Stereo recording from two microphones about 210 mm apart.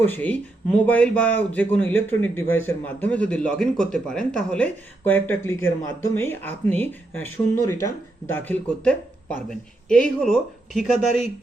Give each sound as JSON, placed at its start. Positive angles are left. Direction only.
{"t": 0.0, "sound": "speech", "side_deg": 10}